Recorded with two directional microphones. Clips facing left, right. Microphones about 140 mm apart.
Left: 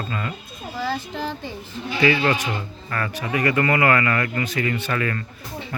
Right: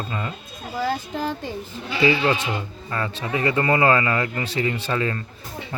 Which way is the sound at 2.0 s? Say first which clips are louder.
Even; 25° right (ahead or behind).